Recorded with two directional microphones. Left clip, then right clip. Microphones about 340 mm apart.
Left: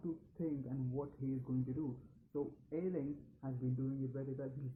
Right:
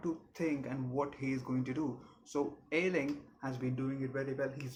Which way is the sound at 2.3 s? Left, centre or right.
Centre.